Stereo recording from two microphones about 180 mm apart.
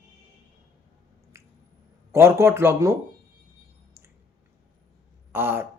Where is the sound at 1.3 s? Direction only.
15° right (ahead or behind).